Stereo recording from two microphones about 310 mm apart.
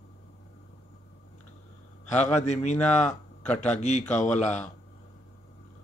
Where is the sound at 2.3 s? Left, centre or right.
Left.